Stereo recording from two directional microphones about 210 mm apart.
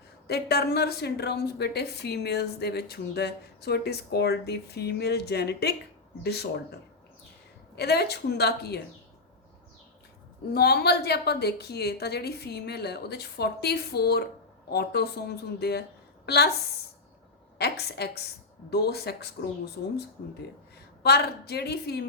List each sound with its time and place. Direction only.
0.3 s a woman's voice: 50° left (ahead or behind)
7.8 s a woman's voice: 50° left (ahead or behind)
10.5 s a woman's voice: 50° left (ahead or behind)
17.6 s a woman's voice: 50° left (ahead or behind)